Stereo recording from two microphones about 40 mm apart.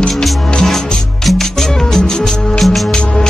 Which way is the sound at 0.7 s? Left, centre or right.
Centre.